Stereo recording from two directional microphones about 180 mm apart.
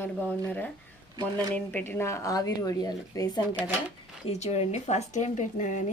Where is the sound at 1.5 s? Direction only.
10° left (ahead or behind).